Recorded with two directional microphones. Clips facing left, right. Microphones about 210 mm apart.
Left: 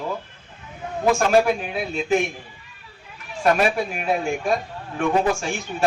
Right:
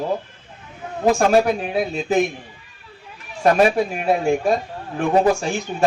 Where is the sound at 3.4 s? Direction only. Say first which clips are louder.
Right 4 dB; 40° right (ahead or behind).